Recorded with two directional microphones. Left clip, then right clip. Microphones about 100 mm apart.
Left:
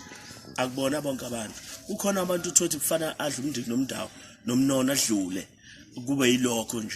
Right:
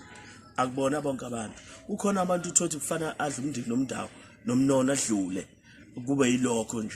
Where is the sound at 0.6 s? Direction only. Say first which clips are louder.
Even; 50° right (ahead or behind).